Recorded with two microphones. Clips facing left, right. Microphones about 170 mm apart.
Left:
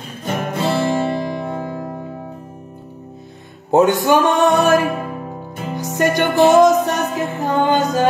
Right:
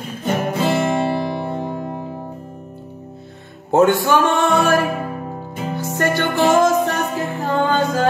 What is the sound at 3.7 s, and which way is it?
Music, 15° left (ahead or behind).